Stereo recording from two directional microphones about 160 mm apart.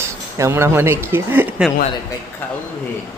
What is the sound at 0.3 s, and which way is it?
Speech, 15° right (ahead or behind).